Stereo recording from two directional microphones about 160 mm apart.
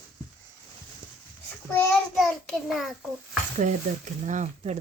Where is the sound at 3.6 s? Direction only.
50° right (ahead or behind).